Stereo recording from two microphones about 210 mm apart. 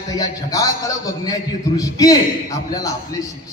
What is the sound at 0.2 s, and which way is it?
A man's voice, 15° left (ahead or behind).